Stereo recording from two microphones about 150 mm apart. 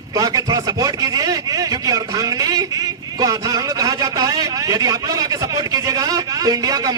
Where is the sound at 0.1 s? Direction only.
25° right (ahead or behind).